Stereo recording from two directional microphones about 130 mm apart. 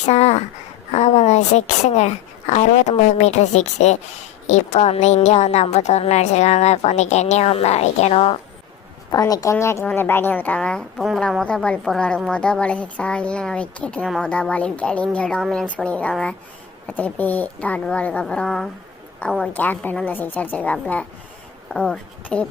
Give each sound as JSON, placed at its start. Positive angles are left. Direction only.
{"t": 0.1, "sound": "a sound", "side_deg": 55}
{"t": 0.9, "sound": "a woman's voice", "side_deg": 60}
{"t": 9.1, "sound": "a woman's voice", "side_deg": 30}
{"t": 19.4, "sound": "a woman's voice", "side_deg": 15}